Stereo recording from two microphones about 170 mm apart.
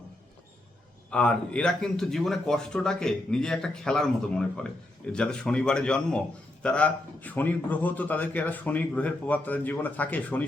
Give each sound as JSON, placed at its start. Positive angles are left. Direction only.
{"t": 1.1, "sound": "a man's voice", "side_deg": 5}